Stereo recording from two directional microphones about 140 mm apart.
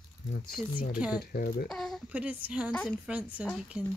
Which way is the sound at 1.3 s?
90° left.